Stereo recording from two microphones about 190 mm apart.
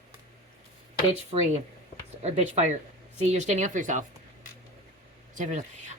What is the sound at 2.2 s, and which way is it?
Speech, 35° right (ahead or behind).